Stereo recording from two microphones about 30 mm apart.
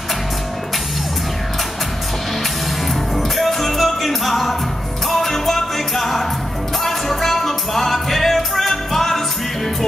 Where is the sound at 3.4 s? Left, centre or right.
Centre.